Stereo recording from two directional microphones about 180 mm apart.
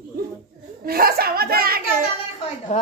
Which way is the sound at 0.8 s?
55° right (ahead or behind).